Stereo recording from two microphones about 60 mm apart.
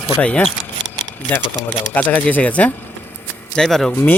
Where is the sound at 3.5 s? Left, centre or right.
Centre.